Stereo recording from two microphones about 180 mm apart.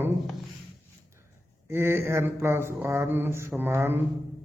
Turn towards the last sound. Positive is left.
turn(degrees=-10)  # may be behind; listen again after turning